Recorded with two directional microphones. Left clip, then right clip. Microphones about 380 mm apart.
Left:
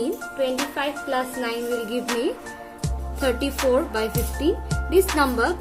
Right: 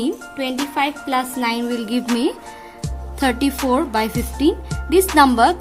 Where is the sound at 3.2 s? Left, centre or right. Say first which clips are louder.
Right 4 dB; right.